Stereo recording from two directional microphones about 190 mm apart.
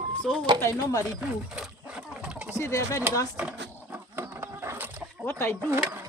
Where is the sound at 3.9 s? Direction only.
10° right (ahead or behind).